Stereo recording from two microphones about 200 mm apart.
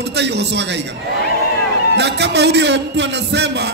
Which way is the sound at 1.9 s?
60° right (ahead or behind).